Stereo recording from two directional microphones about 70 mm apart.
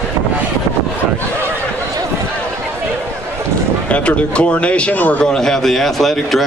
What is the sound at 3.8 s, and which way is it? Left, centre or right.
A man's voice, centre.